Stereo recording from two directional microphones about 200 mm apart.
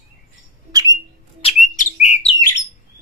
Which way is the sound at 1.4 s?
35° left (ahead or behind).